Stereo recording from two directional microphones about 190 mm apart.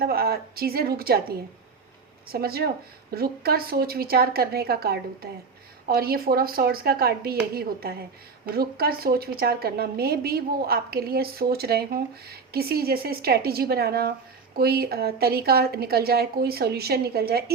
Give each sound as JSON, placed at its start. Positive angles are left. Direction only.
{"t": 0.0, "sound": "a woman's voice", "side_deg": -55}